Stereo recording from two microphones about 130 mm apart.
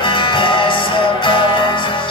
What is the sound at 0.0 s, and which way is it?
Music, 40° left (ahead or behind).